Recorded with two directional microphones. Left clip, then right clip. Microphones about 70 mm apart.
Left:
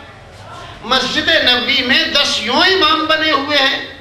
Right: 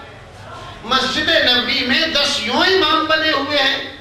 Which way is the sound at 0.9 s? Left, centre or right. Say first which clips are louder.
Left 2 dB; left.